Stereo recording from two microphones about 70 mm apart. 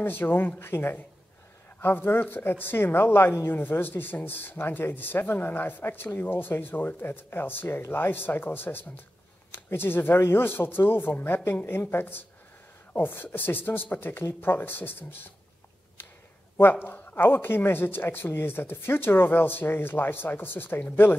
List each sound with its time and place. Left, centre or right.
0.0 s speech: left
16.8 s speech: left